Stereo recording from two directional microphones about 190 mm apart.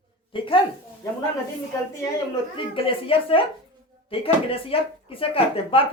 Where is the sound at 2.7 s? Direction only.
30° left (ahead or behind).